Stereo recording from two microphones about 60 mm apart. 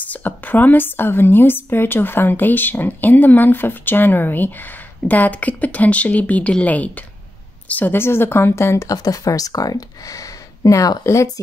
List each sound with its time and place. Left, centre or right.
0.1 s a woman's voice: left